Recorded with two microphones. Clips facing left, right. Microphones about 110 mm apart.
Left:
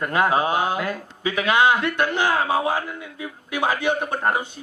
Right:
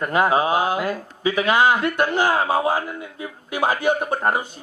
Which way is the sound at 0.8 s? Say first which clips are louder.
Right 3 dB; 30° right (ahead or behind).